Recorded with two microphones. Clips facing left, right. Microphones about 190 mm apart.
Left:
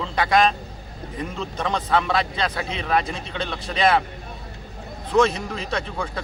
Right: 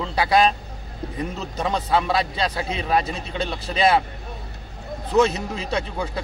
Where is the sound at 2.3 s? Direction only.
30° right (ahead or behind).